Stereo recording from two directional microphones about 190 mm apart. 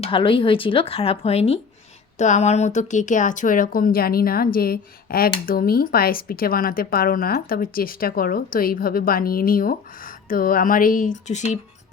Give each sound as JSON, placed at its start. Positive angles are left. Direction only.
{"t": 0.0, "sound": "speech", "side_deg": 25}